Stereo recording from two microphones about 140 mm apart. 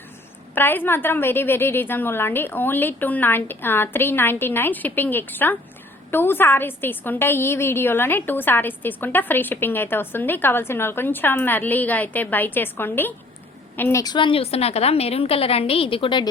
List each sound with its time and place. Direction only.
0.5 s a woman's voice: 15° left (ahead or behind)
14.0 s a woman's voice: 35° left (ahead or behind)